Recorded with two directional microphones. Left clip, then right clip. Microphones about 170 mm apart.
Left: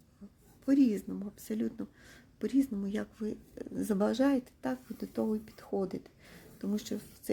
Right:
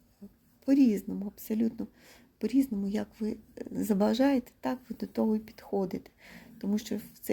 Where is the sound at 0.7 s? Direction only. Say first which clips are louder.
Right 3 dB; 10° right (ahead or behind).